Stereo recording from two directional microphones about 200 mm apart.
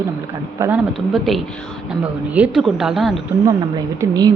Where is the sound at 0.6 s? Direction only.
15° right (ahead or behind).